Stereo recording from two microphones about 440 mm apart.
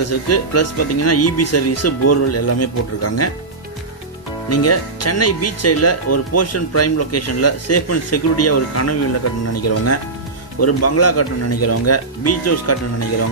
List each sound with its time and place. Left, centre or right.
0.0 s speech: left
4.5 s speech: left